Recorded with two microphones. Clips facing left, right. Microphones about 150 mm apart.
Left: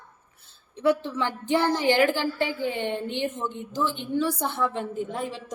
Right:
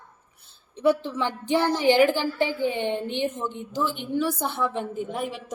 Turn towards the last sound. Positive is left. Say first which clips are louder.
# right 1 dB
turn(degrees=-15)  # may be behind; listen again after turning